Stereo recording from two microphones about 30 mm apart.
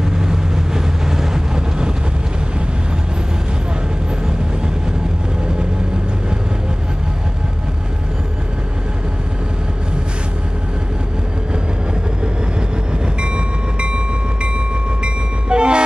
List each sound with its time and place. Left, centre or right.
0.0 s vehicle: centre
13.7 s train: right